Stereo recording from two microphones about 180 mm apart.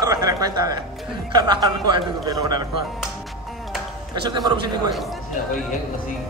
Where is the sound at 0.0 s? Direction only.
20° right (ahead or behind).